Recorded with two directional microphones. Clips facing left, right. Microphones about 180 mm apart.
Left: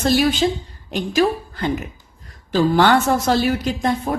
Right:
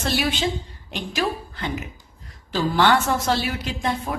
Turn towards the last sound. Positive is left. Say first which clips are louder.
# left 5 dB
turn(degrees=45)  # may be behind; listen again after turning